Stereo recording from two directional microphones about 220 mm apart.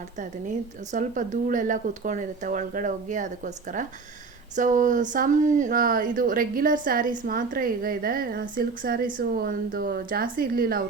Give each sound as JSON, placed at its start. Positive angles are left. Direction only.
{"t": 0.2, "sound": "a woman's voice", "side_deg": -35}